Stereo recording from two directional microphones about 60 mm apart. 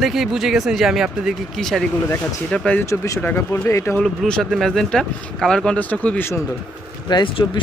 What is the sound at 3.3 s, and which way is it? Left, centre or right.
Speech, left.